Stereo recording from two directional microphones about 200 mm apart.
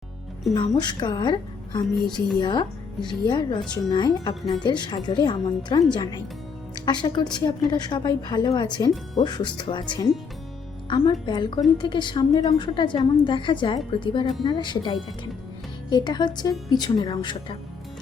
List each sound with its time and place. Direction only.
0.5 s a woman's voice: 20° left (ahead or behind)